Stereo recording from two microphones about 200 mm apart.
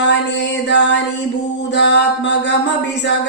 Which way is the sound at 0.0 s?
65° left (ahead or behind).